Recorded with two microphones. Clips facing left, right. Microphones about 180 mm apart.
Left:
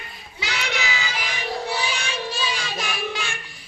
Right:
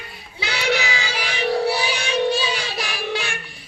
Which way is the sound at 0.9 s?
90° right.